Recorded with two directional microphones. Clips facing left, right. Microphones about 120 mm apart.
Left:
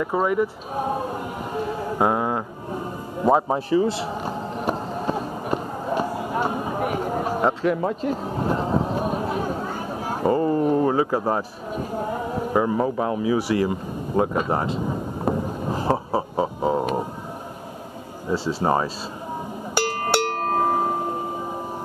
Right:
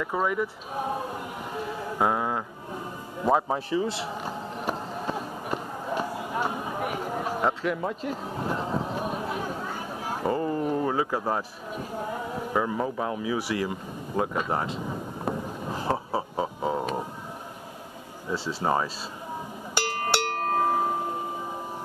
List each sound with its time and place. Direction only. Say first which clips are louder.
0.0 s speech: left 5 dB; 30° left (ahead or behind)
15.2 s a sound: left 7 dB; 35° left (ahead or behind)
18.3 s speech: left 5 dB; 40° left (ahead or behind)
20.5 s music: left 3 dB; 40° left (ahead or behind)